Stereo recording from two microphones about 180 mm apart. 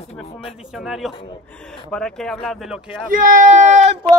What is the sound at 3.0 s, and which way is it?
Speech, 50° right (ahead or behind).